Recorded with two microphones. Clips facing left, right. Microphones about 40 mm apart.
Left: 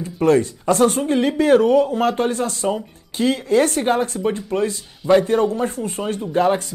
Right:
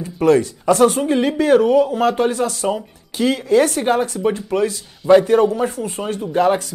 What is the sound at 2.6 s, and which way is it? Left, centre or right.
Speech, centre.